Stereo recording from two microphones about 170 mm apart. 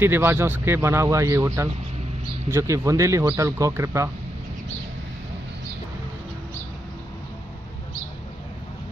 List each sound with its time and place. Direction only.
0.0 s speech: 15° right (ahead or behind)